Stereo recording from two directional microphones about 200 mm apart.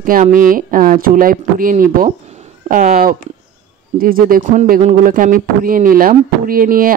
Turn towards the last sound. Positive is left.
turn(degrees=-45)  # may be behind; listen again after turning